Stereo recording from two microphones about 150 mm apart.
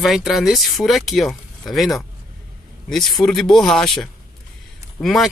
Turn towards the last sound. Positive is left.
turn(degrees=0)  # may be behind; listen again after turning